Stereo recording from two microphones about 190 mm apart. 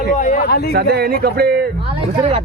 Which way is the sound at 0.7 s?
55° right (ahead or behind).